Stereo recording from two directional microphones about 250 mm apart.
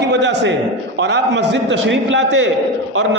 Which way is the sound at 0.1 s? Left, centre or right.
Right.